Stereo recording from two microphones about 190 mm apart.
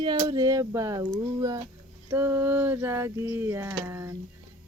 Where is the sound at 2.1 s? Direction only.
10° right (ahead or behind).